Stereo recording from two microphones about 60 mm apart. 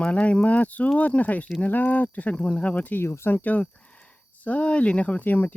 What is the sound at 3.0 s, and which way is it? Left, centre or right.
Speech, left.